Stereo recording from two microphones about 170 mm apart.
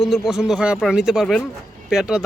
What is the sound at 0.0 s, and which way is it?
A man's voice, centre (ahead or behind).